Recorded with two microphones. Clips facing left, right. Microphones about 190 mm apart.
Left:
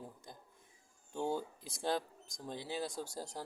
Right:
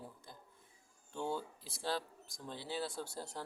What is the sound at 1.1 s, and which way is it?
Speech, 45° left (ahead or behind).